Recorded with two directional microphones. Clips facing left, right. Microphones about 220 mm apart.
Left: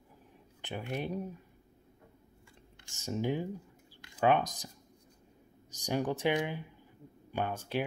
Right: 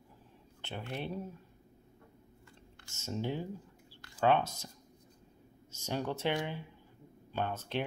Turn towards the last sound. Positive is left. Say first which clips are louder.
# left 2 dB
turn(degrees=10)  # may be behind; listen again after turning